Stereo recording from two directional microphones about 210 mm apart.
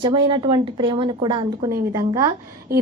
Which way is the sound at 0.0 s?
20° right (ahead or behind).